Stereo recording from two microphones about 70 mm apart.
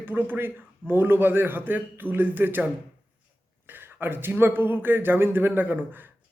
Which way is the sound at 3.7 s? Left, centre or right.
Right.